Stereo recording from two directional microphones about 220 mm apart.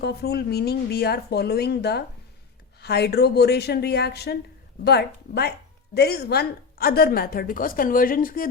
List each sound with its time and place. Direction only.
0.0 s a woman's voice: 45° left (ahead or behind)